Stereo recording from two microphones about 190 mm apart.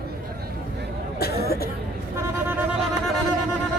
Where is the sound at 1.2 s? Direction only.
55° left (ahead or behind).